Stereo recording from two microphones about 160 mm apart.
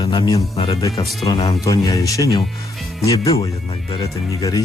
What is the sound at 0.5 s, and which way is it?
Speech, 35° left (ahead or behind).